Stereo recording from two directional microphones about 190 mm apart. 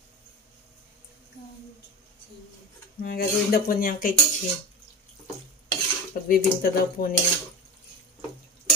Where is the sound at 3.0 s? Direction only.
55° left (ahead or behind).